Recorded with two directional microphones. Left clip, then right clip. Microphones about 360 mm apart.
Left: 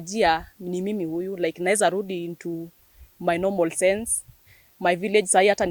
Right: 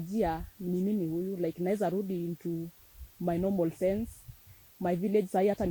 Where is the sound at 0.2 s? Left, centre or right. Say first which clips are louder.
Left 11 dB; centre.